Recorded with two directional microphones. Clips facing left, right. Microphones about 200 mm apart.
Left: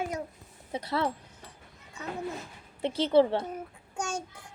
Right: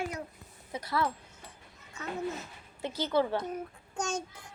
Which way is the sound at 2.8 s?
25° left (ahead or behind).